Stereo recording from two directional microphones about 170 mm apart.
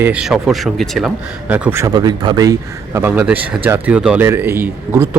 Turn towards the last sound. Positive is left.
turn(degrees=-15)  # may be behind; listen again after turning